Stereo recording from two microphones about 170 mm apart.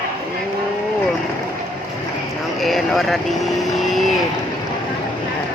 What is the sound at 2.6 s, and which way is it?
Speech, centre (ahead or behind).